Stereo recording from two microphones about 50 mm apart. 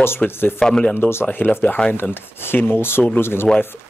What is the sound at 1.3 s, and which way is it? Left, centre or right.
Speech, left.